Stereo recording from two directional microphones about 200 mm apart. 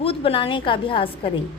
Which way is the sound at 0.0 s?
30° left (ahead or behind).